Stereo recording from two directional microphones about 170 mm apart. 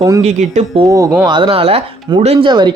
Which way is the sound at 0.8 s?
20° right (ahead or behind).